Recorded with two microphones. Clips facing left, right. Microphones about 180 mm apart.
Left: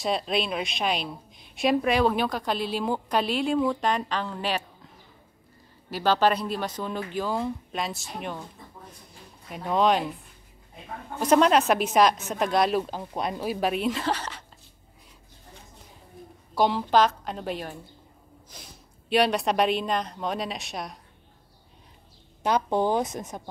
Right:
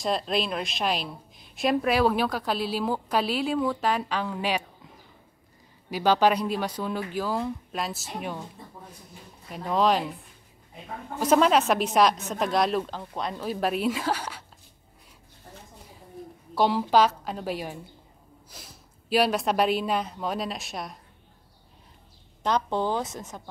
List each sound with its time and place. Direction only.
0.0 s a woman's voice: centre (ahead or behind)
5.9 s speech: 15° right (ahead or behind)
9.5 s a woman's voice: centre (ahead or behind)
11.1 s a woman's voice: centre (ahead or behind)
13.6 s speech: centre (ahead or behind)
16.5 s a woman's voice: 5° right (ahead or behind)
22.4 s speech: 10° left (ahead or behind)